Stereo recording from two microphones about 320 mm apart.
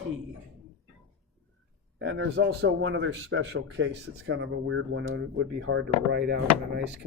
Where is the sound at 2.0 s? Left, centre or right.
Right.